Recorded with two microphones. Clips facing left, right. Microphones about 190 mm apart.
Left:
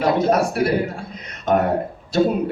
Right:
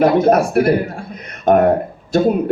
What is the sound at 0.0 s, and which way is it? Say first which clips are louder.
Speech: right 5 dB; 55° right (ahead or behind).